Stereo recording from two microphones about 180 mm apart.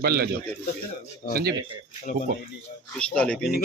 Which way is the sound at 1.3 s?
60° right (ahead or behind).